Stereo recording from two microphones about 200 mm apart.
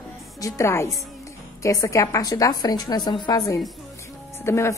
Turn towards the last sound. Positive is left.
turn(degrees=15)  # may be behind; listen again after turning